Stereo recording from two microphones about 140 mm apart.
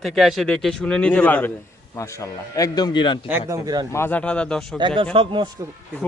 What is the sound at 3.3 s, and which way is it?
Speech, 25° right (ahead or behind).